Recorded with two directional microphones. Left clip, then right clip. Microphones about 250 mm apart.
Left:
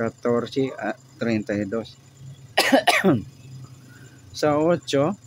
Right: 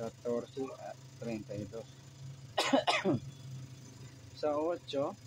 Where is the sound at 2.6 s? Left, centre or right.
Left.